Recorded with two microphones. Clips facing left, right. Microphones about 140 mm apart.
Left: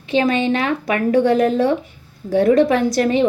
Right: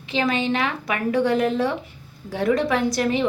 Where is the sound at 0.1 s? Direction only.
45° left (ahead or behind).